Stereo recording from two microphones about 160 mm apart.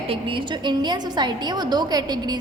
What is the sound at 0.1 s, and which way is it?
A woman's voice, 30° right (ahead or behind).